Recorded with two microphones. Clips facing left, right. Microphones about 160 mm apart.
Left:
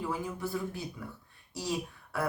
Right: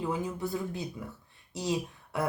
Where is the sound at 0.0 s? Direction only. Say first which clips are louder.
Right 3 dB; 20° right (ahead or behind).